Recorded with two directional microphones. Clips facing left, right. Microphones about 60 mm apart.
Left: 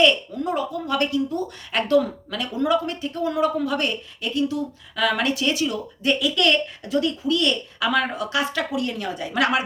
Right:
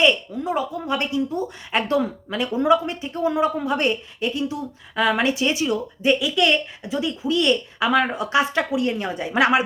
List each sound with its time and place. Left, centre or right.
0.0 s speech: centre